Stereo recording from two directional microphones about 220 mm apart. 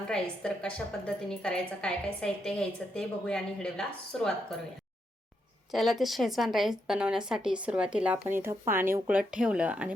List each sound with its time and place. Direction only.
0.1 s speech: 5° left (ahead or behind)
5.7 s speech: centre (ahead or behind)